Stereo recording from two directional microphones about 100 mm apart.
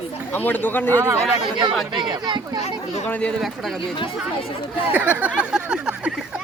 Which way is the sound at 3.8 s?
60° left (ahead or behind).